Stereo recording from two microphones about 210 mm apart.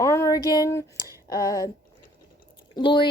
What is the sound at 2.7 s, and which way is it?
Speech, 20° left (ahead or behind).